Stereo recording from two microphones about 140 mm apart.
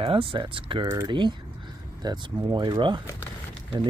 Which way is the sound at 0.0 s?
40° right (ahead or behind).